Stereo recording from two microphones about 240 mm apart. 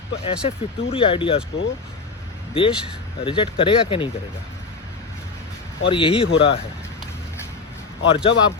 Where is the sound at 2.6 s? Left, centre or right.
Left.